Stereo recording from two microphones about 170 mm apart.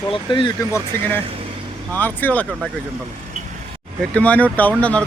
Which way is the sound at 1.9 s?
10° left (ahead or behind).